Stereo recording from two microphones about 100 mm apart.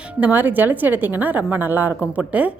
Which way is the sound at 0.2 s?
15° right (ahead or behind).